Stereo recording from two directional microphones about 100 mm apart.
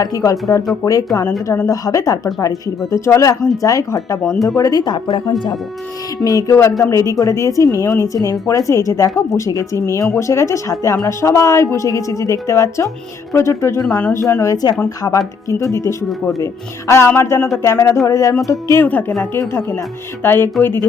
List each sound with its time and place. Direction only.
0.0 s speech: 35° left (ahead or behind)
4.2 s speech: 5° left (ahead or behind)
4.4 s speech: 35° left (ahead or behind)
6.2 s speech: 35° left (ahead or behind)
18.7 s speech: 20° left (ahead or behind)
20.2 s speech: 20° left (ahead or behind)